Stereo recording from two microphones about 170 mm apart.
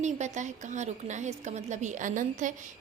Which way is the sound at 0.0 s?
45° right (ahead or behind).